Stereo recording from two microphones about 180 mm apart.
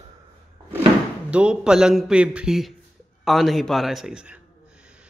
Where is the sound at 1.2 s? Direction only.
5° right (ahead or behind).